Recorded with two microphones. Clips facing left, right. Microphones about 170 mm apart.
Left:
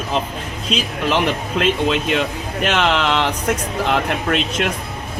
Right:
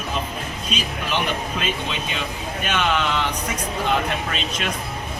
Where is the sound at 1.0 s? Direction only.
90° left.